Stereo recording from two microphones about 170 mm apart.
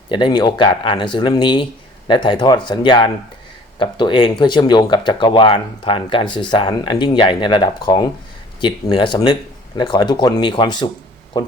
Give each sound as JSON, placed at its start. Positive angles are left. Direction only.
{"t": 0.1, "sound": "speech", "side_deg": 25}